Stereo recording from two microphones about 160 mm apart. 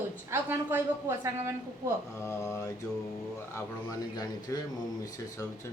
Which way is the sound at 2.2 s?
15° left (ahead or behind).